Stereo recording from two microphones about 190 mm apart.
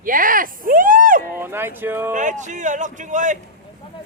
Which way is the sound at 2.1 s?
40° right (ahead or behind).